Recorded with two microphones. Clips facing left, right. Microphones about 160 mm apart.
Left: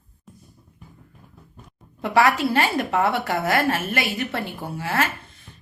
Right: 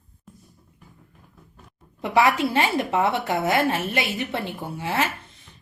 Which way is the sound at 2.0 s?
15° right (ahead or behind).